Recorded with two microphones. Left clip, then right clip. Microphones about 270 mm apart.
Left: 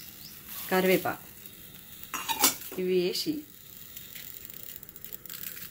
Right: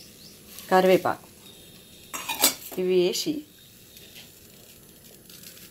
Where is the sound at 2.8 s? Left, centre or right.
Centre.